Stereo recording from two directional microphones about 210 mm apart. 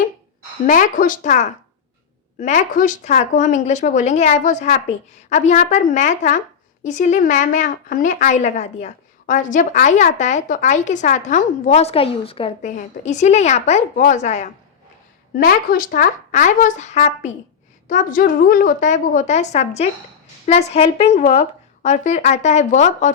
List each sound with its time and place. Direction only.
0.7 s a woman's voice: 40° left (ahead or behind)